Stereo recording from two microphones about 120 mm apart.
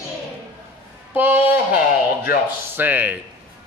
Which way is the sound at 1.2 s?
15° right (ahead or behind).